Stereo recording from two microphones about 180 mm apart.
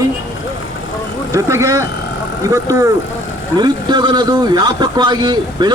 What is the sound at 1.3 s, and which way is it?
A man's voice, 15° right (ahead or behind).